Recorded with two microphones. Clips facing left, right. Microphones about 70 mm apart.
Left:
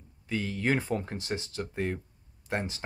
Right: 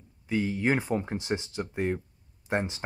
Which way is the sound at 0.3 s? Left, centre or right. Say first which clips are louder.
Right 3 dB; centre.